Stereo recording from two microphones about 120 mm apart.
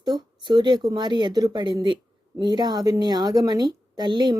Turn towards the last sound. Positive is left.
turn(degrees=-40)  # may be behind; listen again after turning